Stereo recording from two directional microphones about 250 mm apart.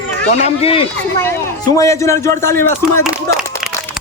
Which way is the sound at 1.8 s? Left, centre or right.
Centre.